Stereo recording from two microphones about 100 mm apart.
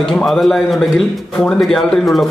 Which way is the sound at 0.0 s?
Centre (ahead or behind).